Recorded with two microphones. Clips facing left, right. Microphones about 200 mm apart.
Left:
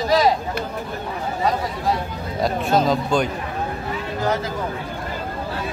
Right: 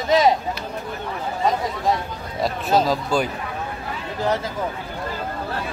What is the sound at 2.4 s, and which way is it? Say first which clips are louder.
Speech: left 1 dB; centre (ahead or behind).